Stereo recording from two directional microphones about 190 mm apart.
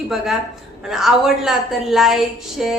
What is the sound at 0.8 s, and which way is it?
A woman's voice, centre (ahead or behind).